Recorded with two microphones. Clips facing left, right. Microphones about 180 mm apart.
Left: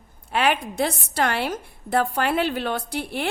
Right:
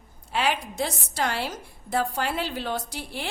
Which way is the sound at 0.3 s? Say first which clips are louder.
Left 4 dB; 60° left (ahead or behind).